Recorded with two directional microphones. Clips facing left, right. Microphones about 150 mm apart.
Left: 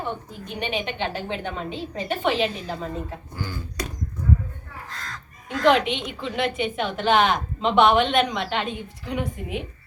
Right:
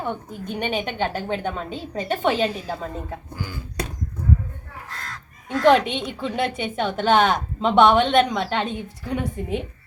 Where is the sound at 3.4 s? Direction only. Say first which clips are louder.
Left 2 dB; 10° right (ahead or behind).